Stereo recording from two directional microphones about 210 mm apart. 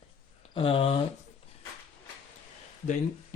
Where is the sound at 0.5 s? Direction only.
25° left (ahead or behind).